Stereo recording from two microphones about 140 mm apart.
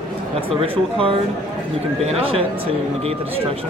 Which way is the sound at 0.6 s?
40° right (ahead or behind).